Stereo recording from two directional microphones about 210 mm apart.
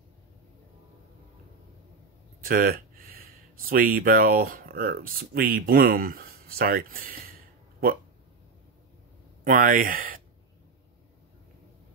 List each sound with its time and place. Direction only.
2.4 s speech: 45° right (ahead or behind)
9.4 s speech: 40° right (ahead or behind)